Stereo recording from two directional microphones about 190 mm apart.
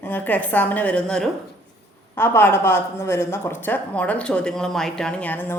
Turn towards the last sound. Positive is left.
turn(degrees=10)  # may be behind; listen again after turning